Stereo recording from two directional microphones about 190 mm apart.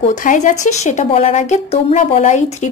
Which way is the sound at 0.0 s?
40° left (ahead or behind).